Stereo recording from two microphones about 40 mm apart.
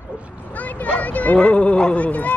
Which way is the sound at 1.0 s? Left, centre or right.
Left.